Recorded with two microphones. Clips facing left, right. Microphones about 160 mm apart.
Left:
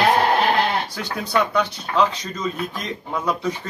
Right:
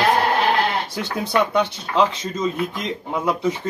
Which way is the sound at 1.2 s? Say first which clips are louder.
Right 1 dB; 25° right (ahead or behind).